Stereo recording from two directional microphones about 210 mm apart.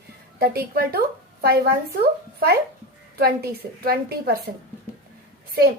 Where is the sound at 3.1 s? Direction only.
50° right (ahead or behind).